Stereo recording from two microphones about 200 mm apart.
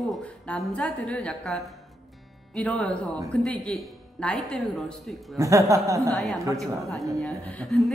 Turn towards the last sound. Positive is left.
turn(degrees=5)  # may be behind; listen again after turning